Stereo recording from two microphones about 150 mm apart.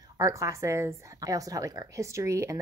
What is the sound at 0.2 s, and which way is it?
A woman's voice, 20° right (ahead or behind).